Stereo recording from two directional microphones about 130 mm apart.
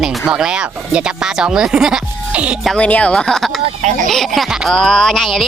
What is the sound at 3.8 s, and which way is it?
Speech, 75° right (ahead or behind).